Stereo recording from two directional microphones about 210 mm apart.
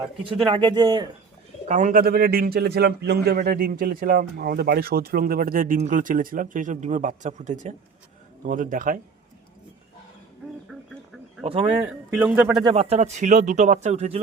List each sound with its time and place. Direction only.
0.3 s speech: 25° right (ahead or behind)
1.6 s a man's voice: 35° right (ahead or behind)
11.4 s speech: 25° right (ahead or behind)
12.1 s speech: 10° right (ahead or behind)
12.6 s speech: 30° right (ahead or behind)